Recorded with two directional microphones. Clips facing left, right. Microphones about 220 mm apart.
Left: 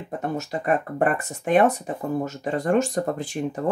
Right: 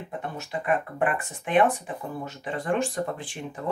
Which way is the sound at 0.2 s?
40° left (ahead or behind).